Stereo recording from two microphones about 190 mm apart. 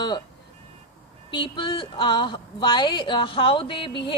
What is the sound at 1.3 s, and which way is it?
A woman's voice, 25° left (ahead or behind).